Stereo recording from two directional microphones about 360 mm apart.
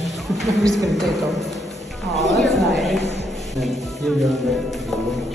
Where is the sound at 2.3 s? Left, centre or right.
Centre.